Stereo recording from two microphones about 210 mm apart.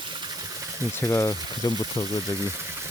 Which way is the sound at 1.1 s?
15° left (ahead or behind).